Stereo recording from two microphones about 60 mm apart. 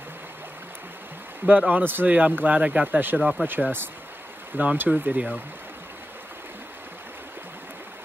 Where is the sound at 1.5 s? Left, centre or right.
Right.